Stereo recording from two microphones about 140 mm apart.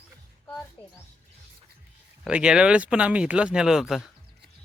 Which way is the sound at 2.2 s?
5° right (ahead or behind).